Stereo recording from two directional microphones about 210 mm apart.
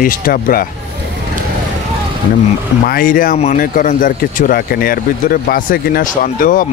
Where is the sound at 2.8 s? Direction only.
40° left (ahead or behind).